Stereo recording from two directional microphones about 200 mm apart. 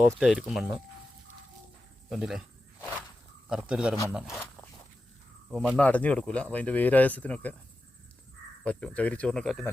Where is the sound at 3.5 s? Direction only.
5° right (ahead or behind).